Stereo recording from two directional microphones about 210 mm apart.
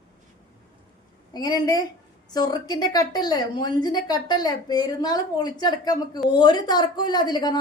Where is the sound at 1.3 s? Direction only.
20° left (ahead or behind).